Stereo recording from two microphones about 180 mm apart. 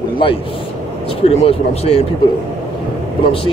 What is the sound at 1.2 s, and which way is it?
Speech, 35° left (ahead or behind).